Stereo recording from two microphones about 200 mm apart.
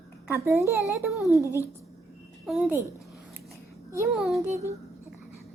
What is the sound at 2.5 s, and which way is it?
Speech, centre (ahead or behind).